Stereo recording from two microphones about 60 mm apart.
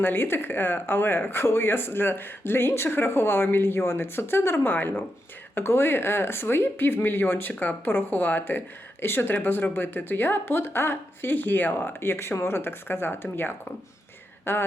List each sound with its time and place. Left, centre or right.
0.0 s speech: left
14.5 s speech: left